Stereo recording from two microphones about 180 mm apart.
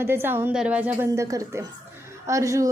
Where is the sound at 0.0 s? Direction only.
10° right (ahead or behind).